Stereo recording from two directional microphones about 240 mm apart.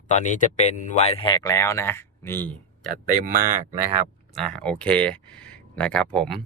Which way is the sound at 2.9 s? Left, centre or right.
Right.